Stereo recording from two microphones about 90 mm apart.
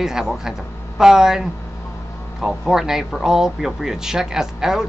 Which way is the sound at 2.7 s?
5° right (ahead or behind).